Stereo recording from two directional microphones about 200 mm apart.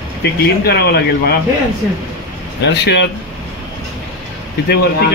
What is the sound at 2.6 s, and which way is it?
Speech, 60° left (ahead or behind).